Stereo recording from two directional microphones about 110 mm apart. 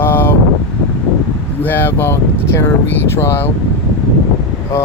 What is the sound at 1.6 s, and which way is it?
Speech, 20° left (ahead or behind).